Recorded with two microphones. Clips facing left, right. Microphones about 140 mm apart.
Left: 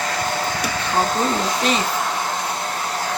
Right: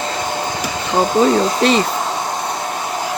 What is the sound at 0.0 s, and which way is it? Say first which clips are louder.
Hair dryer: right 2 dB; 20° right (ahead or behind).